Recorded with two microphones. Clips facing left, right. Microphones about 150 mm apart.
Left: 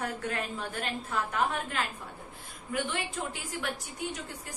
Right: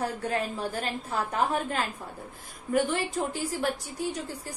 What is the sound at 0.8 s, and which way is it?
A woman's voice, 35° right (ahead or behind).